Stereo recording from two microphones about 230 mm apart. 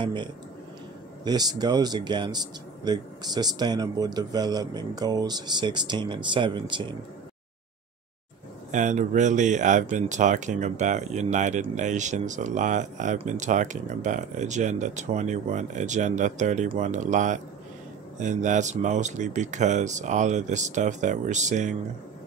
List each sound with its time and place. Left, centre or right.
0.0 s a man's voice: centre
8.7 s speech: right